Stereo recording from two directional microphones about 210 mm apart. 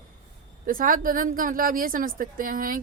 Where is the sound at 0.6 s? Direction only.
40° right (ahead or behind).